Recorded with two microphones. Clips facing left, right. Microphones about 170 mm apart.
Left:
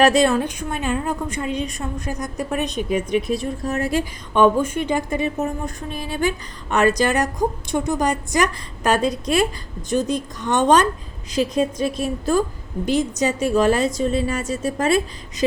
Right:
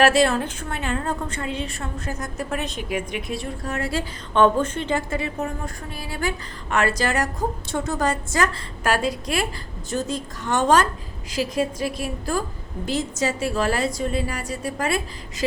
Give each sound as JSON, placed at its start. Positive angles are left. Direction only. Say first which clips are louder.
{"t": 0.0, "sound": "a woman's voice", "louder": "left 2 dB", "side_deg": 20}